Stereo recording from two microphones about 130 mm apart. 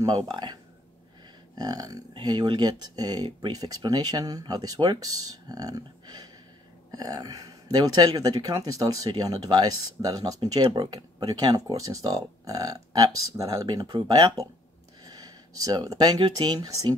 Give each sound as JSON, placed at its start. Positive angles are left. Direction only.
{"t": 0.0, "sound": "speech", "side_deg": -30}